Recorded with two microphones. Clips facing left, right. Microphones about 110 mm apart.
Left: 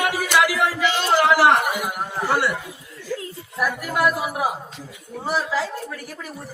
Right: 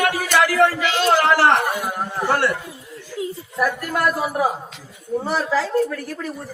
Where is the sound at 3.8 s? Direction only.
10° left (ahead or behind).